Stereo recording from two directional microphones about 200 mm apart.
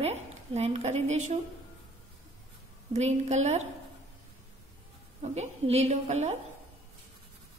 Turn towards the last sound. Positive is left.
turn(degrees=-35)  # may be behind; listen again after turning